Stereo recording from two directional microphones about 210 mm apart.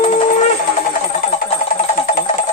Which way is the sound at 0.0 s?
35° left (ahead or behind).